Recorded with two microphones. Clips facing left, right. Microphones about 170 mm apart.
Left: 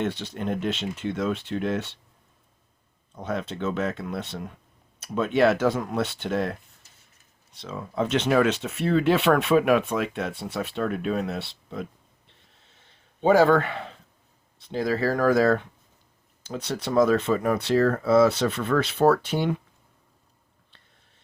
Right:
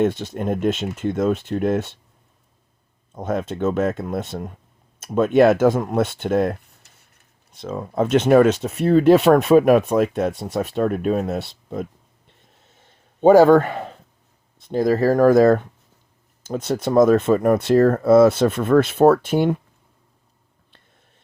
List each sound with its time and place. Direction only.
0.0 s speech: 45° right (ahead or behind)
3.2 s speech: 45° right (ahead or behind)
13.2 s speech: 45° right (ahead or behind)